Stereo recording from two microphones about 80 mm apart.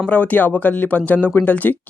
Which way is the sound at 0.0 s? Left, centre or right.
Centre.